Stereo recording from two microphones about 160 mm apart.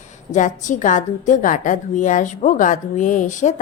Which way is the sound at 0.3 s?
50° left (ahead or behind).